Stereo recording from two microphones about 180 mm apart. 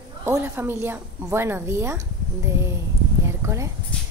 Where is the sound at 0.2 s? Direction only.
15° right (ahead or behind).